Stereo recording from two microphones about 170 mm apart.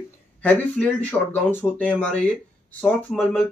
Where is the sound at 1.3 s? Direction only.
10° left (ahead or behind).